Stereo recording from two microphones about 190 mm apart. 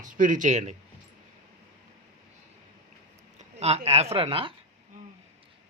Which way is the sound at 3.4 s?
35° right (ahead or behind).